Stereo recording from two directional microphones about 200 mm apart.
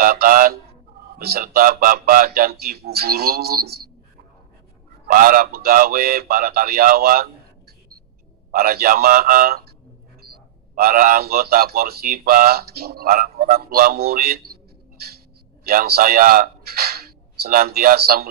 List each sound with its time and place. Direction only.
0.0 s speech: 45° right (ahead or behind)
5.0 s speech: 45° right (ahead or behind)
8.5 s speech: 45° right (ahead or behind)
10.7 s speech: 45° right (ahead or behind)